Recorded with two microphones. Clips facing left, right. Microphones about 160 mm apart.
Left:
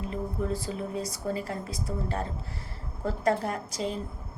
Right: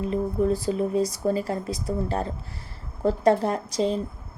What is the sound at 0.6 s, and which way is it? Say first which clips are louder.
A woman's voice: right 9 dB; 20° right (ahead or behind).